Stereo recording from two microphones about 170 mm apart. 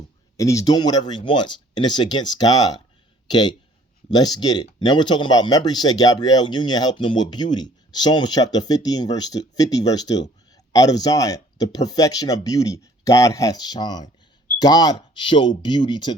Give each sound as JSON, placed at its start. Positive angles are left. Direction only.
{"t": 0.3, "sound": "speech", "side_deg": 20}